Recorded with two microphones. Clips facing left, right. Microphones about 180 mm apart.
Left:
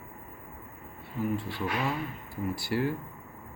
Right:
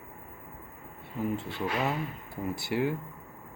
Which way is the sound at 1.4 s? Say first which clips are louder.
Right 1 dB; 20° right (ahead or behind).